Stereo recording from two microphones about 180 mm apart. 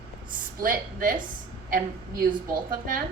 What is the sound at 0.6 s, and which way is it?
Speech, 50° right (ahead or behind).